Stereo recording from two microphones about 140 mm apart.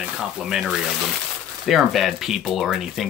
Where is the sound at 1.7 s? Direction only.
Centre (ahead or behind).